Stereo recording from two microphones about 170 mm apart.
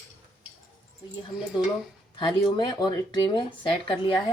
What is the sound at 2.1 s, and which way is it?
Speech, 25° left (ahead or behind).